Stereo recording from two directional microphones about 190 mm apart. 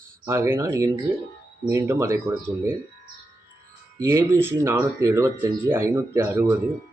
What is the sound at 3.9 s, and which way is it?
Speech, 15° right (ahead or behind).